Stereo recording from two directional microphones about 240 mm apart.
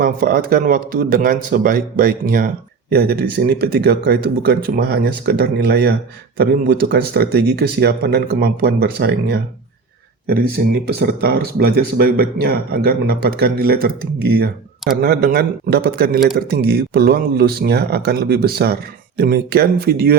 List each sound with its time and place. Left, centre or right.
0.0 s speech: right
10.8 s speech: right